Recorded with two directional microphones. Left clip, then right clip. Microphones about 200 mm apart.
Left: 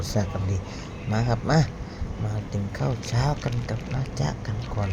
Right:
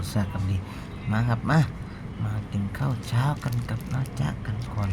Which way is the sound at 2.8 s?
5° left (ahead or behind).